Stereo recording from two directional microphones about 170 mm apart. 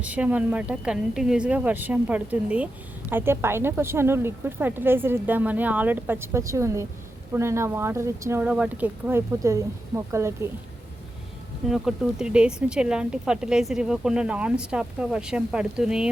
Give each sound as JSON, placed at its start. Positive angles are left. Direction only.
{"t": 0.0, "sound": "a woman's voice", "side_deg": -10}
{"t": 11.7, "sound": "speech", "side_deg": -5}